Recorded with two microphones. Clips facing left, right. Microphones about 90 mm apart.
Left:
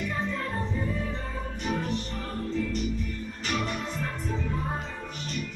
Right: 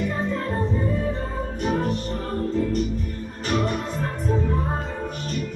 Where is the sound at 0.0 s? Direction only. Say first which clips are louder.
Right 5 dB; 35° right (ahead or behind).